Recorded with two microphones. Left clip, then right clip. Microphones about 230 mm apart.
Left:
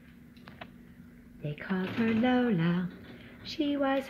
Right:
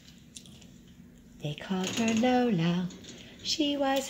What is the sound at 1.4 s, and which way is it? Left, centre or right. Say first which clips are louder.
Speech: right 1 dB; centre.